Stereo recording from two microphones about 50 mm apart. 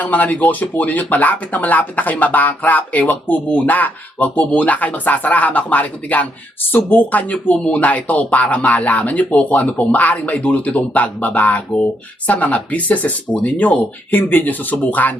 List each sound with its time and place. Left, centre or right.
0.0 s speech: left
14.1 s speech: left